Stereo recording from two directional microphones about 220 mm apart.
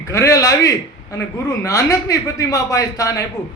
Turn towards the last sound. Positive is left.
turn(degrees=15)  # may be behind; listen again after turning